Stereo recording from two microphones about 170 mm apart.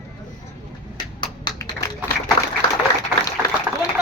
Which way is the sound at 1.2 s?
20° left (ahead or behind).